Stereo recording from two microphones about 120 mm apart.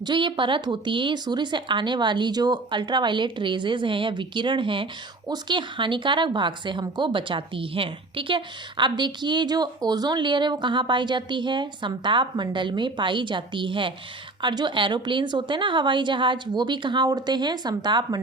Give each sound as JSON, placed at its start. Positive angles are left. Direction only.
{"t": 0.0, "sound": "a woman's voice", "side_deg": -40}